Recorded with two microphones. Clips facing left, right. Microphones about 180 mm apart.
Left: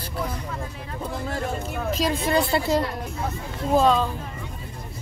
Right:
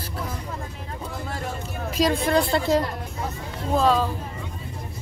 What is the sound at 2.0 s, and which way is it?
Speech, 5° left (ahead or behind).